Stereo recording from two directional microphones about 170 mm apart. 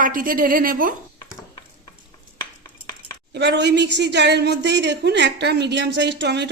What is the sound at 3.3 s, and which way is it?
Speech, 90° right.